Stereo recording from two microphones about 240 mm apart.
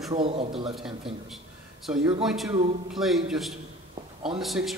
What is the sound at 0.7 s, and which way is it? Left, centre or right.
A man's voice, centre.